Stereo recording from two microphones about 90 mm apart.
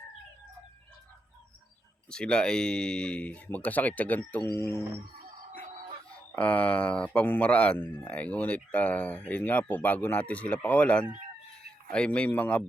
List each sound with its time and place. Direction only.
2.0 s speech: 10° left (ahead or behind); by 4.8 s 30° left (ahead or behind)
6.1 s speech: 15° left (ahead or behind)